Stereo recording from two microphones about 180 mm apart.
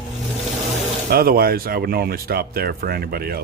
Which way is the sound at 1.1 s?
55° right (ahead or behind).